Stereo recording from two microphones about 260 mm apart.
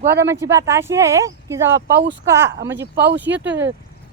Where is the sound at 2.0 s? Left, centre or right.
Right.